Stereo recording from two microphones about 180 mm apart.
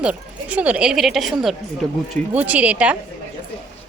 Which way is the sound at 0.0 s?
5° right (ahead or behind).